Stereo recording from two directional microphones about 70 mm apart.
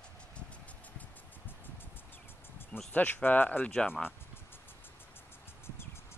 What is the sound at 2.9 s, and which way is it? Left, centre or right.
Speech, left.